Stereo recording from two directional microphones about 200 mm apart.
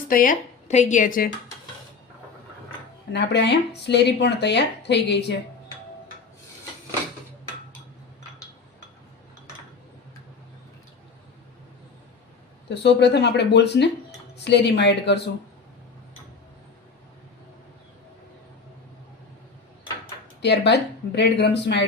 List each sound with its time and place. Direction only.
0.1 s speech: 45° left (ahead or behind)
3.1 s speech: 60° left (ahead or behind)
12.6 s speech: 60° left (ahead or behind)
20.4 s speech: 60° left (ahead or behind)